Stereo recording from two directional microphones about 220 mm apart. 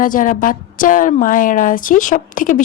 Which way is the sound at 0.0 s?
35° left (ahead or behind).